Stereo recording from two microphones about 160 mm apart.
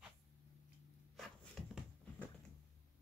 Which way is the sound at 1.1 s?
Centre (ahead or behind).